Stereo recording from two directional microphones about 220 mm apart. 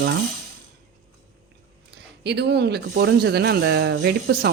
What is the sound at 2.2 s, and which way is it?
Speech, 50° right (ahead or behind).